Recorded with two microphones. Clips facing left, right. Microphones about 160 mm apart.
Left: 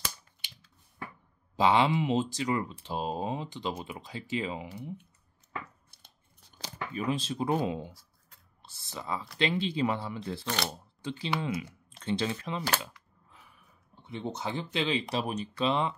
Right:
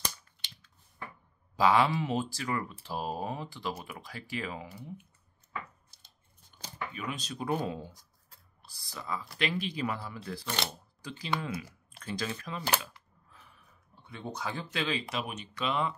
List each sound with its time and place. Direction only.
1.6 s speech: 20° left (ahead or behind)
6.9 s speech: 35° left (ahead or behind)
14.0 s speech: 20° left (ahead or behind)
15.1 s speech: 35° left (ahead or behind)